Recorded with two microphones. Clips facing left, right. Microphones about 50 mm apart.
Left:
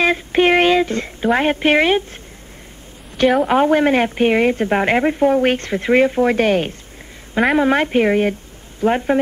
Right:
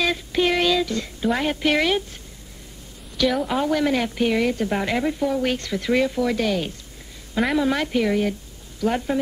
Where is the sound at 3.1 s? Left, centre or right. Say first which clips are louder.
Left 7 dB; left.